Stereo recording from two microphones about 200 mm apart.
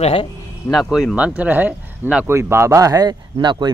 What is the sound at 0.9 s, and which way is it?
Speech, 5° right (ahead or behind).